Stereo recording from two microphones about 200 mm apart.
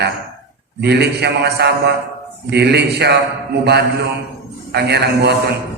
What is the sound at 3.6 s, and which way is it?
Mantra, 55° right (ahead or behind).